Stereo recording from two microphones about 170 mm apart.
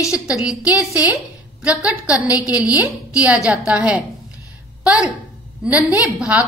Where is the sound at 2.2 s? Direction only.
20° left (ahead or behind).